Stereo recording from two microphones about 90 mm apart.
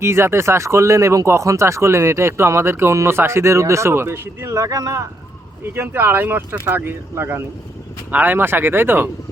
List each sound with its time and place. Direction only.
0.0 s speech: 30° right (ahead or behind)
5.7 s speech: 25° right (ahead or behind)